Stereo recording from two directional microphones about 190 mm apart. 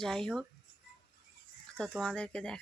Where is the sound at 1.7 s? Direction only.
5° left (ahead or behind).